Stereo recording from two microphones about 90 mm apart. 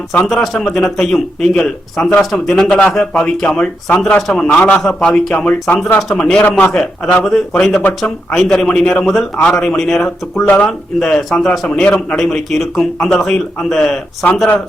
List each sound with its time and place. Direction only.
0.3 s a man's voice: centre (ahead or behind)
6.0 s a man's voice: 5° left (ahead or behind)
7.8 s a man's voice: 15° left (ahead or behind)
8.3 s a man's voice: 5° left (ahead or behind)